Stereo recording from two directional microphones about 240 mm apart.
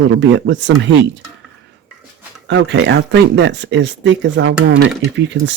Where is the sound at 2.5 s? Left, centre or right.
Right.